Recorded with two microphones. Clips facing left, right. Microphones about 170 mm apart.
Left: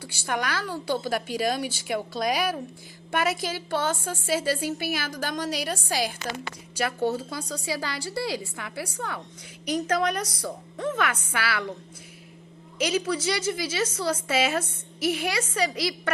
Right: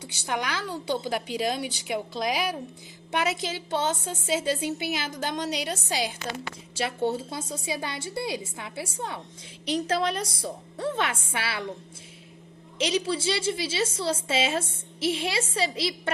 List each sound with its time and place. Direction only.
0.0 s a woman's voice: 20° right (ahead or behind)
3.1 s a woman's voice: 20° right (ahead or behind)
12.8 s a woman's voice: 25° right (ahead or behind)